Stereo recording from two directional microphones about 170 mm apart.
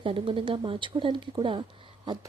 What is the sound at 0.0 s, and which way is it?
A woman's voice, 30° right (ahead or behind).